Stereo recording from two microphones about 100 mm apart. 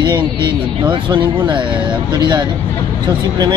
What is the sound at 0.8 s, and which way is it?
Speech, 50° right (ahead or behind).